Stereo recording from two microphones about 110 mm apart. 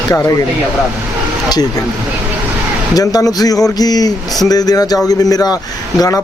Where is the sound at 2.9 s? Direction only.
35° left (ahead or behind).